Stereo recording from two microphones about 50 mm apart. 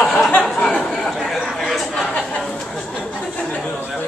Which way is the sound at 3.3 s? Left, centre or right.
Centre.